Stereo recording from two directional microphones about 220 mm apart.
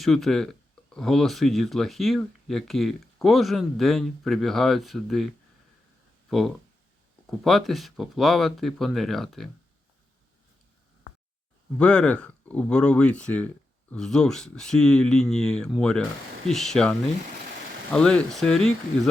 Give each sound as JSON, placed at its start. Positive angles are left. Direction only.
{"t": 0.0, "sound": "speech", "side_deg": 0}
{"t": 7.3, "sound": "speech", "side_deg": 0}
{"t": 11.8, "sound": "speech", "side_deg": 5}
{"t": 17.9, "sound": "speech", "side_deg": 5}